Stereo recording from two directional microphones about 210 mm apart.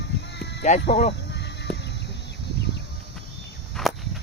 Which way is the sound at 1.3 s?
55° left (ahead or behind).